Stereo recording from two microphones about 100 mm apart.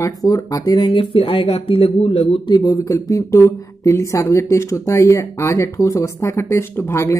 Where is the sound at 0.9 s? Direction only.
60° left (ahead or behind).